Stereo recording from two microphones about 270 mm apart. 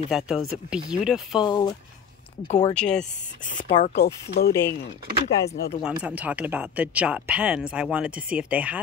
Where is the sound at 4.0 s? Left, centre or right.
Left.